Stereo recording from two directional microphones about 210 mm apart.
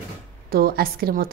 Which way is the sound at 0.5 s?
45° right (ahead or behind).